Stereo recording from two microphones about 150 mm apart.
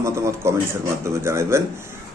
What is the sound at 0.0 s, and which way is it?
A man's voice, 20° right (ahead or behind).